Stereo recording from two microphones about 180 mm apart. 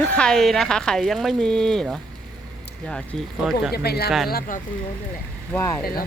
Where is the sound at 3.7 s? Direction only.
60° left (ahead or behind).